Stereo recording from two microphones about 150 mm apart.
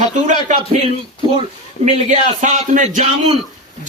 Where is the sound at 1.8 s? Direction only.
50° right (ahead or behind).